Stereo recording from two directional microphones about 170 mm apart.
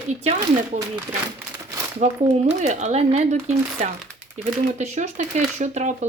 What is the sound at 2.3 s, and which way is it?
Speech, 45° right (ahead or behind).